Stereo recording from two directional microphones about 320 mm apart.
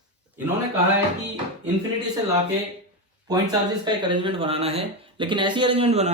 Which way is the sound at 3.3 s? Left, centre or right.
Centre.